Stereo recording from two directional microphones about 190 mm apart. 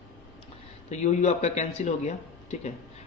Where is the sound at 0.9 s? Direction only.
35° left (ahead or behind).